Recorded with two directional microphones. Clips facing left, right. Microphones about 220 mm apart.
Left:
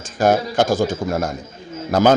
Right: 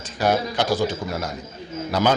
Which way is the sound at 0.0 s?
50° left (ahead or behind).